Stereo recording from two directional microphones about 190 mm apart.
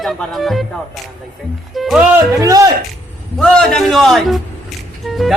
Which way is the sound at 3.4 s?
Centre (ahead or behind).